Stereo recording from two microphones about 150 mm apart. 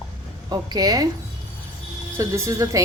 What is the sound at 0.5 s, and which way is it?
Speech, 25° right (ahead or behind).